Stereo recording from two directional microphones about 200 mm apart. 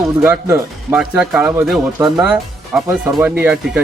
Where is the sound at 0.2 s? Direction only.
10° right (ahead or behind).